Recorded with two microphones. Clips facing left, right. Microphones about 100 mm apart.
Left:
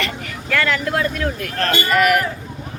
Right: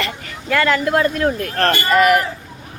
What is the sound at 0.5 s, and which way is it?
Speech, 25° right (ahead or behind).